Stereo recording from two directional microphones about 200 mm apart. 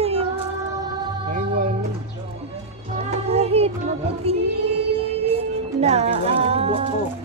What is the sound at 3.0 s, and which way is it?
Music, 30° right (ahead or behind).